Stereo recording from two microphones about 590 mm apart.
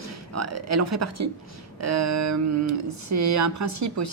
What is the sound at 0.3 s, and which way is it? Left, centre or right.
Speech, right.